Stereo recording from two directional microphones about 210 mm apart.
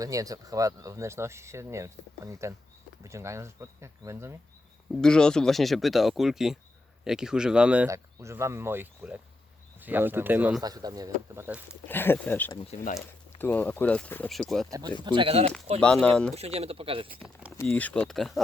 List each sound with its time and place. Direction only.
0.0 s speech: 15° right (ahead or behind)
4.9 s speech: 5° left (ahead or behind)
11.9 s speech: 10° left (ahead or behind)
12.7 s speech: 35° left (ahead or behind)
13.4 s speech: 10° left (ahead or behind)
14.7 s speech: 20° right (ahead or behind)
15.8 s speech: 5° left (ahead or behind)
16.3 s speech: 30° right (ahead or behind)
17.2 s speech: centre (ahead or behind)